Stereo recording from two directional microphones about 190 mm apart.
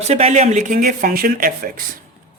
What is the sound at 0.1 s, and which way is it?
Speech, 35° right (ahead or behind).